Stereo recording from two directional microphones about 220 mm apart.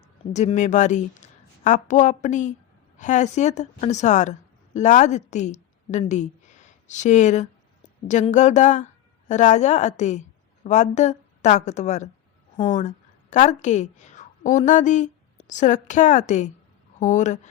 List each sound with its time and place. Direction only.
0.3 s a woman's voice: 30° left (ahead or behind)
13.3 s a woman's voice: 35° left (ahead or behind)